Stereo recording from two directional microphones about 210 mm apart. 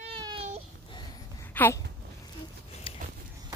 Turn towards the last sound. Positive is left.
turn(degrees=25)  # may be behind; listen again after turning